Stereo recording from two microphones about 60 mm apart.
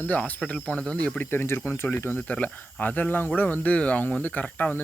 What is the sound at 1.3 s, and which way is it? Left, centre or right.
Speech, left.